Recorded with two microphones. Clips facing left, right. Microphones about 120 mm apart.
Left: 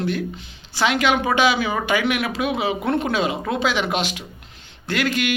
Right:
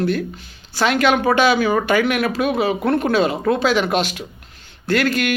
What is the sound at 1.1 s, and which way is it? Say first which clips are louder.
Speech: right 3 dB; 50° right (ahead or behind).